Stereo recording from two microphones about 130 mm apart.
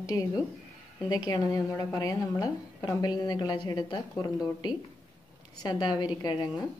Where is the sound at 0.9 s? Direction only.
30° left (ahead or behind).